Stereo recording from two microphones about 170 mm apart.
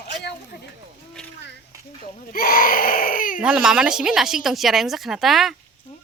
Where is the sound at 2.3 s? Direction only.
60° left (ahead or behind).